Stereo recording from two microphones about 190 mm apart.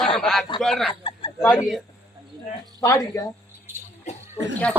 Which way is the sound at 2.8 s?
15° left (ahead or behind).